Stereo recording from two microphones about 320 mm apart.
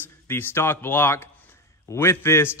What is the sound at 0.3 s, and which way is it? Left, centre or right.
A man's voice, centre.